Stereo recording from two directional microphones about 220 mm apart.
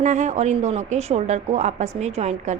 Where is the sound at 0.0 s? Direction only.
35° right (ahead or behind).